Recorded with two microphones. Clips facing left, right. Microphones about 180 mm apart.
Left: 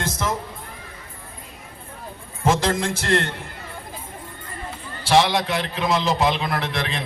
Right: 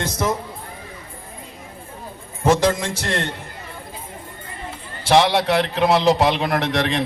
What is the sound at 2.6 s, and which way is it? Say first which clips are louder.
Speech: right 2 dB; 55° left (ahead or behind).